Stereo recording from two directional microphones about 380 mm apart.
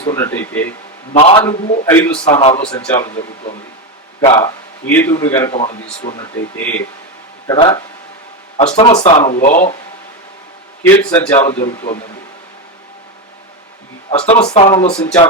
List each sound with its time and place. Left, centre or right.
0.0 s speech: centre
2.6 s speech: centre
6.6 s speech: centre
10.8 s speech: centre
14.1 s speech: centre